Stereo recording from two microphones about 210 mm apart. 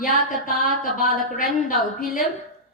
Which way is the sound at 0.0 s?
40° left (ahead or behind).